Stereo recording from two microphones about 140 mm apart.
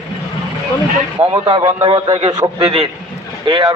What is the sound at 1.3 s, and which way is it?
A man's voice, 40° right (ahead or behind).